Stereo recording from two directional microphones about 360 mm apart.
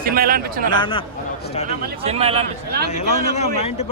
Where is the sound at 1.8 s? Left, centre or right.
Centre.